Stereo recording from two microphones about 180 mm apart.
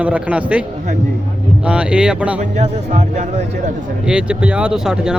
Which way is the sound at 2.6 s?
40° right (ahead or behind).